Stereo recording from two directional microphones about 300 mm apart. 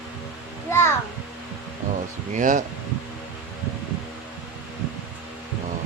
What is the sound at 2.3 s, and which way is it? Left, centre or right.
Speech, right.